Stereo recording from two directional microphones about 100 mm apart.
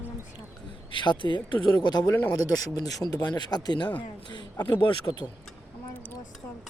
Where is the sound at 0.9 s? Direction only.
50° left (ahead or behind).